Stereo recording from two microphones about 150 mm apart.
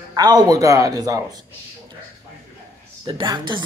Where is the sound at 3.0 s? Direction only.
30° right (ahead or behind).